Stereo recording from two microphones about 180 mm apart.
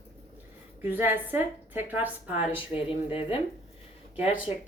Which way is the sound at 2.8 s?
30° left (ahead or behind).